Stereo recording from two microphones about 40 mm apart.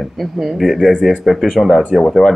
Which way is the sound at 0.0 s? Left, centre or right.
Centre.